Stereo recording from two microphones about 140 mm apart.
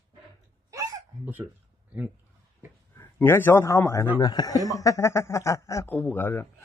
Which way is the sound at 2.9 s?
15° left (ahead or behind).